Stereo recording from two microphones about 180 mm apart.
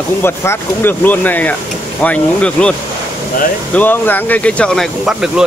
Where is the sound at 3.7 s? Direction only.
10° left (ahead or behind).